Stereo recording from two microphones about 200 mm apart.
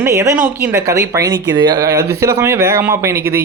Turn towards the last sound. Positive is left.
turn(degrees=-15)  # may be behind; listen again after turning